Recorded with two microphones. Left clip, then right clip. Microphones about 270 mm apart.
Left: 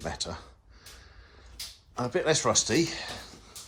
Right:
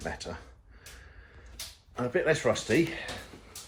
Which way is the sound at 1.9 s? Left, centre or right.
Centre.